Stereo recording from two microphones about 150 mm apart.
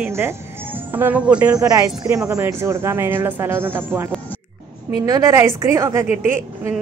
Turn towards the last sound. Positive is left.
turn(degrees=-15)  # may be behind; listen again after turning